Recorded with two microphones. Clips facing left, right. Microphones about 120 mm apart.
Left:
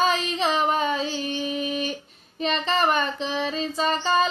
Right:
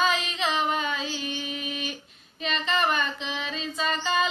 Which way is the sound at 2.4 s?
35° left (ahead or behind).